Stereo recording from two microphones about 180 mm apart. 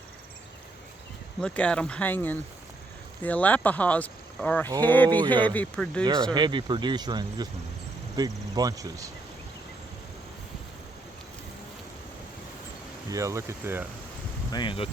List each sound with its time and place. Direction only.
1.4 s speech: 5° left (ahead or behind)
6.3 s speech: 25° right (ahead or behind)
13.1 s speech: 15° right (ahead or behind)
14.5 s speech: 25° left (ahead or behind)